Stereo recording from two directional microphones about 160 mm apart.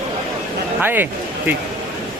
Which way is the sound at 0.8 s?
10° right (ahead or behind).